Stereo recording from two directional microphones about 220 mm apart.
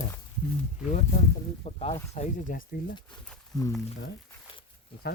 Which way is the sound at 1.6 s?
30° left (ahead or behind).